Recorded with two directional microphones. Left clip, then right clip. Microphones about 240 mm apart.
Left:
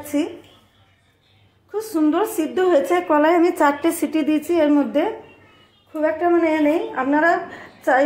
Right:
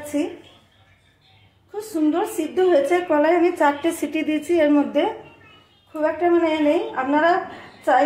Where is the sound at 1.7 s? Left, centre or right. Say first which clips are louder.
Left 2 dB; left.